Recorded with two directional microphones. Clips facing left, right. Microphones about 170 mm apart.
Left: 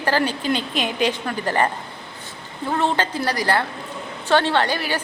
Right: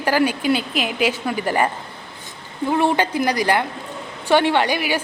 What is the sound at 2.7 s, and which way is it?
A woman's voice, 10° right (ahead or behind).